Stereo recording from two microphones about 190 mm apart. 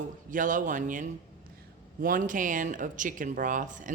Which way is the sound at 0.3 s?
45° right (ahead or behind).